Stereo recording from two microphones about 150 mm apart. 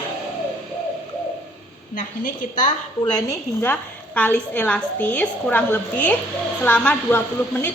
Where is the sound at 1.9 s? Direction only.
60° left (ahead or behind).